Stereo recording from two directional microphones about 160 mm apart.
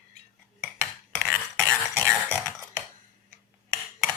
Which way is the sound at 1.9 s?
10° right (ahead or behind).